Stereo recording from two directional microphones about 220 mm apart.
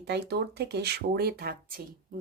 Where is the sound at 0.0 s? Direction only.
50° right (ahead or behind).